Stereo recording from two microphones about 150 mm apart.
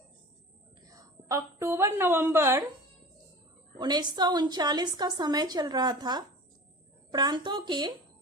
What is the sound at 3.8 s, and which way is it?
A woman's voice, 30° right (ahead or behind).